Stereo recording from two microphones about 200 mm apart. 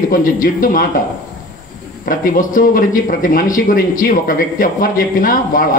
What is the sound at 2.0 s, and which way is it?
Speech, 45° left (ahead or behind).